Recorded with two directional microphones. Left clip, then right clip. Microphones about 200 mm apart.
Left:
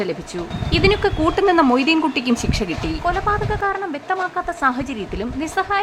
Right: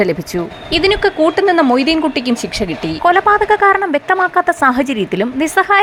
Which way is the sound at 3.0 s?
30° right (ahead or behind).